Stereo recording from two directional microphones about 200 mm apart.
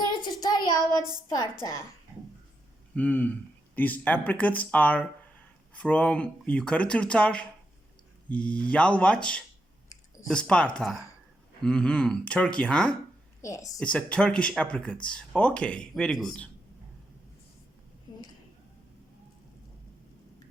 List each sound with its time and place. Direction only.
0.0 s child singing: 20° left (ahead or behind)
2.9 s speech: 10° left (ahead or behind)
13.4 s speech: 15° left (ahead or behind)
13.7 s speech: 5° left (ahead or behind)